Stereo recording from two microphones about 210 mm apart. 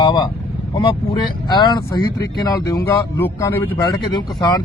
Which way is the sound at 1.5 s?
20° left (ahead or behind).